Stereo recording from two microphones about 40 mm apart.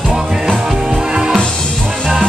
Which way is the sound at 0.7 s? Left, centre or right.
Centre.